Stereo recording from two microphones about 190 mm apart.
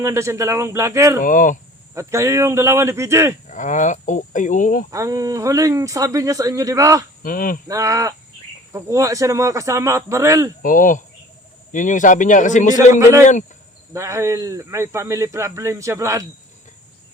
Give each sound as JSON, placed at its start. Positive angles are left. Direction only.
{"t": 0.0, "sound": "a man's voice", "side_deg": -15}
{"t": 1.2, "sound": "speech", "side_deg": 45}
{"t": 2.0, "sound": "a man's voice", "side_deg": -15}
{"t": 3.5, "sound": "speech", "side_deg": 40}
{"t": 4.9, "sound": "a man's voice", "side_deg": -15}
{"t": 7.2, "sound": "speech", "side_deg": 45}
{"t": 7.7, "sound": "a man's voice", "side_deg": -15}
{"t": 10.6, "sound": "speech", "side_deg": 45}
{"t": 13.0, "sound": "a man's voice", "side_deg": -15}